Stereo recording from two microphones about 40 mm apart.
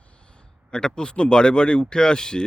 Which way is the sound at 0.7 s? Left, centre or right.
Left.